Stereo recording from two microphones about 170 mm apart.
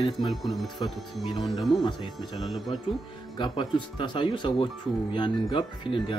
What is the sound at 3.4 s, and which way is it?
Speech, 30° left (ahead or behind).